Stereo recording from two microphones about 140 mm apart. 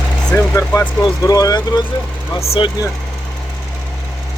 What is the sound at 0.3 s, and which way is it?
Speech, 20° left (ahead or behind).